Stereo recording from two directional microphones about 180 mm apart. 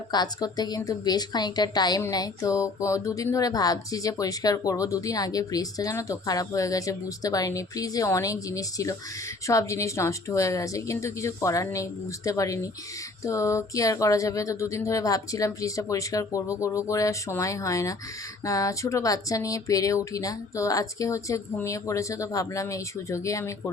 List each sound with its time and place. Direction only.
0.1 s a woman's voice: 20° left (ahead or behind)